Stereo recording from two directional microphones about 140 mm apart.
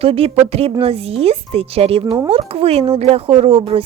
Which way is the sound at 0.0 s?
45° right (ahead or behind).